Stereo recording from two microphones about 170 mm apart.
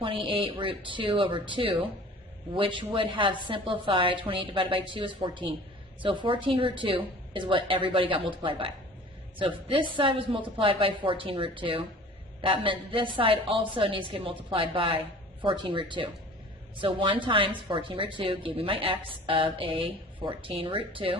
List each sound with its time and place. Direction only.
0.0 s a woman's voice: 30° right (ahead or behind)